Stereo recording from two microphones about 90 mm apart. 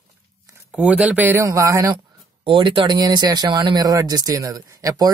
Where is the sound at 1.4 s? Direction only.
35° right (ahead or behind).